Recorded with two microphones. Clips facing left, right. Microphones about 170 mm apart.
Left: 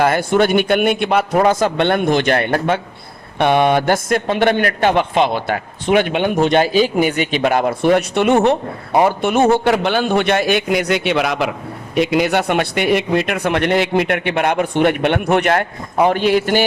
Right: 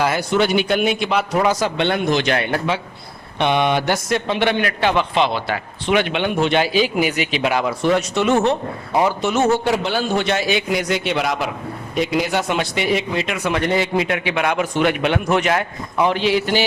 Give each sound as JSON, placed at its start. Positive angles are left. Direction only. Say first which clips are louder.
{"t": 0.0, "sound": "a man's voice", "louder": "left 4 dB", "side_deg": 55}